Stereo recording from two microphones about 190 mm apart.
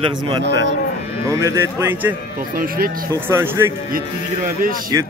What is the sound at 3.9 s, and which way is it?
Speech, 50° right (ahead or behind).